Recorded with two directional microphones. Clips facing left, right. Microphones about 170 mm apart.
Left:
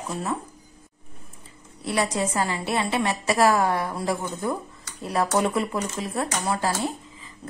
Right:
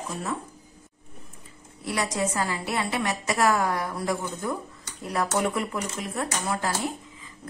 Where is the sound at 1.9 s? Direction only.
30° left (ahead or behind).